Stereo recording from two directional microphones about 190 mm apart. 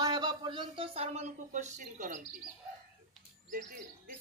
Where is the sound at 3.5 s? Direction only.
45° right (ahead or behind).